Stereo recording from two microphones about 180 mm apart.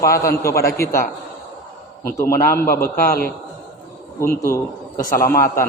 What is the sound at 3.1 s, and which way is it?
Speech, 55° left (ahead or behind).